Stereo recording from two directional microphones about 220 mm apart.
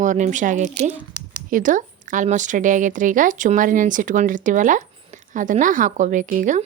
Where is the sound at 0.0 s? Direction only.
35° right (ahead or behind).